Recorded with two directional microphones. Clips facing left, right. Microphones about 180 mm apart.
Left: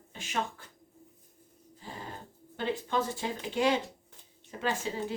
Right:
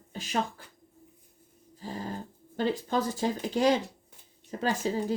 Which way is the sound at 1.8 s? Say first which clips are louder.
Right 6 dB; 40° right (ahead or behind).